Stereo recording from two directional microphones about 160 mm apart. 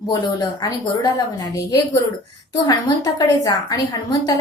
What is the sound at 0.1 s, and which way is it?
A woman's voice, 25° left (ahead or behind).